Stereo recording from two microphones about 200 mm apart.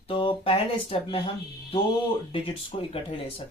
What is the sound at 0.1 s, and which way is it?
Speech, 25° left (ahead or behind).